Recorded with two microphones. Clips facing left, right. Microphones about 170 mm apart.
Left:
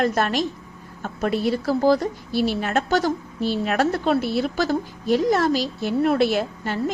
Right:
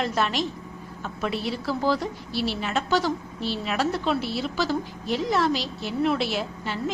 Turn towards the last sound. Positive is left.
turn(degrees=50)  # may be behind; listen again after turning